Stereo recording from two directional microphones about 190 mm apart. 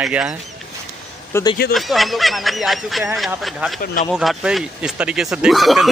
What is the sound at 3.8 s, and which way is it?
Speech, 50° left (ahead or behind).